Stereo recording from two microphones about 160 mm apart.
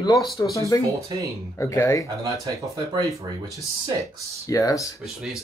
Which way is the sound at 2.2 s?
20° right (ahead or behind).